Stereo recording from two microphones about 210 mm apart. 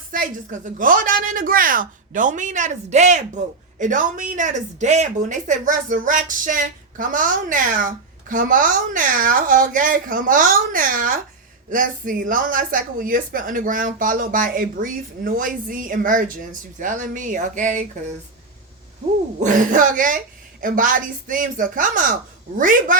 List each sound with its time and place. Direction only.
0.1 s a woman's voice: 40° right (ahead or behind)
19.4 s a woman's voice: 40° right (ahead or behind)